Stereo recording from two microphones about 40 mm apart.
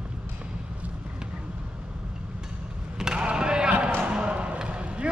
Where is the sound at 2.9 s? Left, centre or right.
Centre.